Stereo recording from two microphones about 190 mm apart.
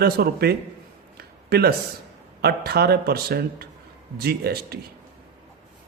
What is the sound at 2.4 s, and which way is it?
Speech, 55° right (ahead or behind).